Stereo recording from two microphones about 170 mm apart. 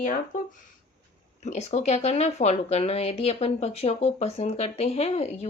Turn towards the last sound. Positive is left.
turn(degrees=40)  # may be behind; listen again after turning